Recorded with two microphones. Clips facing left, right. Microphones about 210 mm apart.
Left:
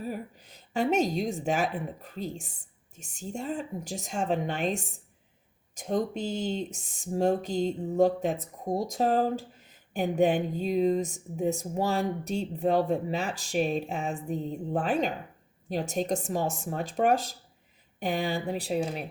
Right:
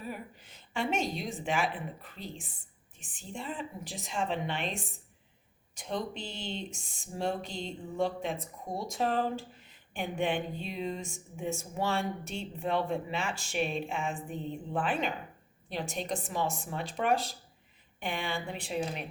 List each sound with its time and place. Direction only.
0.0 s a woman's voice: 40° left (ahead or behind)